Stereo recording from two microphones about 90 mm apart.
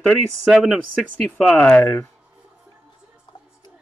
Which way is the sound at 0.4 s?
5° right (ahead or behind).